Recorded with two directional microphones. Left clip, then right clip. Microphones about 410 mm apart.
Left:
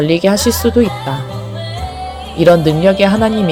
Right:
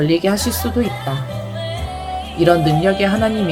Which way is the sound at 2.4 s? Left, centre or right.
Left.